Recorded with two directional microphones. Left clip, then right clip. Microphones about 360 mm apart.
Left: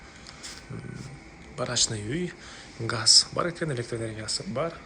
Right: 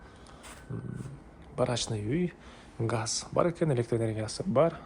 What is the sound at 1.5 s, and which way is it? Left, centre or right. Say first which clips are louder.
Speech: left 2 dB; centre.